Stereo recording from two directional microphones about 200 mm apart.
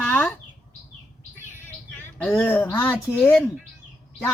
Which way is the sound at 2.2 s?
5° left (ahead or behind).